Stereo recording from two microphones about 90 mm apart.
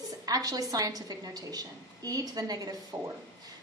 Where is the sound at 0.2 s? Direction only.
45° right (ahead or behind).